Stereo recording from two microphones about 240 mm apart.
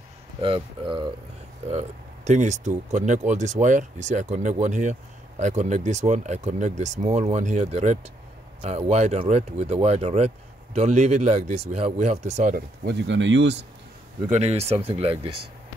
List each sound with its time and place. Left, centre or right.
0.4 s speech: right
14.3 s speech: right